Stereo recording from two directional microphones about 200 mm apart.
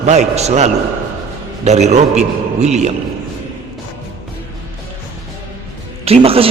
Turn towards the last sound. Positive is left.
turn(degrees=-30)  # may be behind; listen again after turning